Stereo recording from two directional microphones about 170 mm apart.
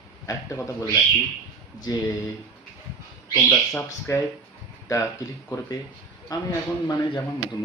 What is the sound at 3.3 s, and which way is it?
Speech, 10° left (ahead or behind).